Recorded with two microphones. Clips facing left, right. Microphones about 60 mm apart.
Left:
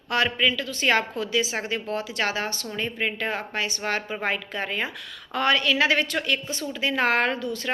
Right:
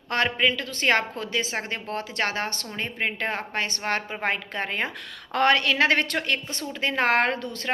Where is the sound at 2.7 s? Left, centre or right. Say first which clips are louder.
Left 1 dB; right.